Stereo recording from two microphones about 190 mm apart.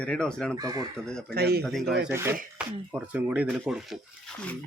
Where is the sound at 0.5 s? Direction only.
20° right (ahead or behind).